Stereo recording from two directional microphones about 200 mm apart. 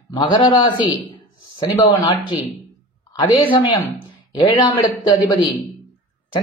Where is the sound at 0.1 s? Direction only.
25° left (ahead or behind).